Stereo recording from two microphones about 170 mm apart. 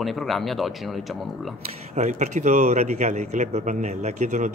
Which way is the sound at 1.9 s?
45° right (ahead or behind).